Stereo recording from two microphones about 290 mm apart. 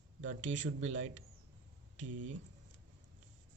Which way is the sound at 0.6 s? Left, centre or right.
Right.